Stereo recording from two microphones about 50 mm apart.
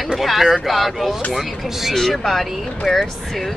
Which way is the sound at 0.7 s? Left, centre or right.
Centre.